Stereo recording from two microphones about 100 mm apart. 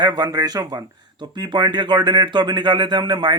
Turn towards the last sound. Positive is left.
turn(degrees=-50)  # may be behind; listen again after turning